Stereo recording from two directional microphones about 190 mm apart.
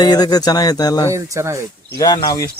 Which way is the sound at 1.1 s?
15° right (ahead or behind).